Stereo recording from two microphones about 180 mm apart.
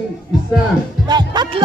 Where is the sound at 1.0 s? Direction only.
25° right (ahead or behind).